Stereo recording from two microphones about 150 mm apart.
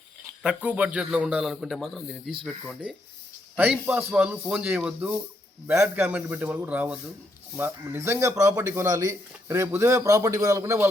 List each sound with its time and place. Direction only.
0.4 s a man's voice: 10° right (ahead or behind)